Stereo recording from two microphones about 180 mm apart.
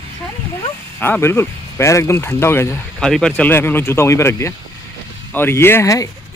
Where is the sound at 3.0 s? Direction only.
5° left (ahead or behind).